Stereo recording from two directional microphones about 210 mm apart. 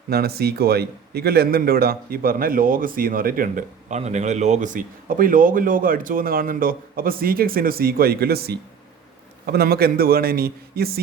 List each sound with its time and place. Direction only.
0.1 s a man's voice: 50° right (ahead or behind)